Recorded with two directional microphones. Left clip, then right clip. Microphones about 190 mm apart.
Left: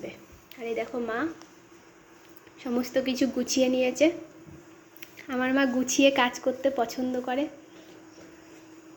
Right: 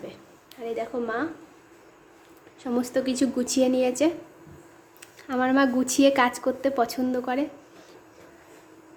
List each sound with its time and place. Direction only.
0.6 s speech: centre (ahead or behind)
2.9 s a woman's voice: 5° right (ahead or behind)